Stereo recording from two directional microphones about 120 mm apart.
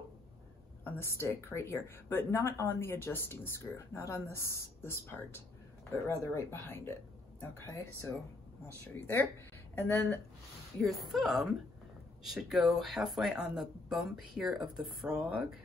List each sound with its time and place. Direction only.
0.8 s speech: 20° left (ahead or behind)
9.8 s speech: 20° left (ahead or behind)
10.8 s speech: centre (ahead or behind)